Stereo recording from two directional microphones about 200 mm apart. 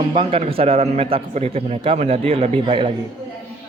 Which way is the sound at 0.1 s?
25° right (ahead or behind).